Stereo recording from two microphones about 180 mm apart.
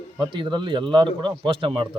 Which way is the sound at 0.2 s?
25° right (ahead or behind).